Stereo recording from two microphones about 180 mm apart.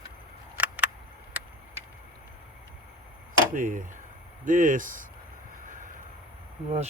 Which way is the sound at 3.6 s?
50° right (ahead or behind).